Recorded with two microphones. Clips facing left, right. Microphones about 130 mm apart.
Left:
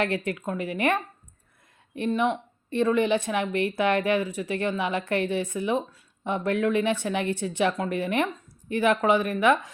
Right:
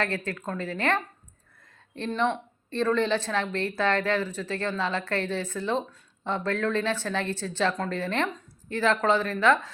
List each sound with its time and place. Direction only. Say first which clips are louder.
0.0 s speech: left 3 dB; 20° left (ahead or behind)
2.0 s speech: left 2 dB; 10° left (ahead or behind)